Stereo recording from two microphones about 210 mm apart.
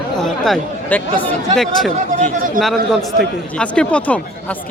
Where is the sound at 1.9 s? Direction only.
35° right (ahead or behind).